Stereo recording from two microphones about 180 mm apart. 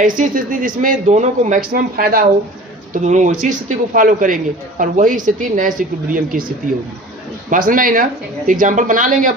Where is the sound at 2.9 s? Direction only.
40° right (ahead or behind).